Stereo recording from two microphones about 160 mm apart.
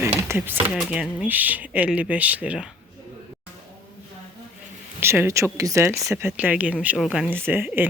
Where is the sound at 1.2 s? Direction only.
10° right (ahead or behind).